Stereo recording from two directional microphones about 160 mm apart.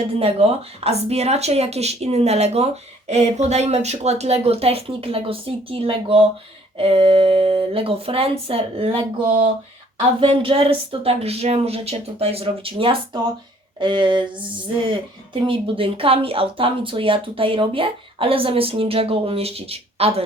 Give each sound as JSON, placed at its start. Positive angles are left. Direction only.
{"t": 0.2, "sound": "speech", "side_deg": -40}